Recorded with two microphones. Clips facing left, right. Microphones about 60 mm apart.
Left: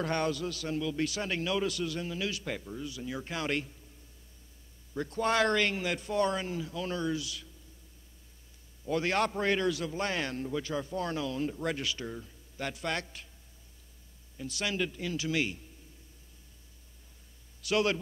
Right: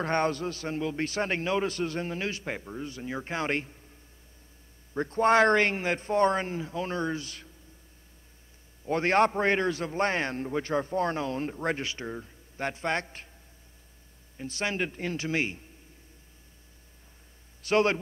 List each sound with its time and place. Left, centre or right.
0.0 s a man's voice: right
4.9 s a man's voice: right
8.8 s a man's voice: right
14.3 s a man's voice: right
17.6 s a man's voice: right